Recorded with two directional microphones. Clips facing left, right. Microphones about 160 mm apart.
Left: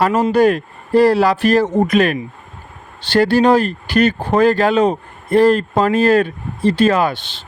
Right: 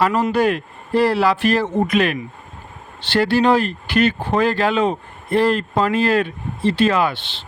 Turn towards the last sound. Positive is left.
turn(degrees=45)  # may be behind; listen again after turning